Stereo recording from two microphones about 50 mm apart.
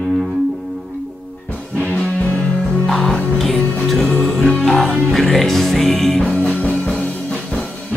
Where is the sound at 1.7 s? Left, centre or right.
Left.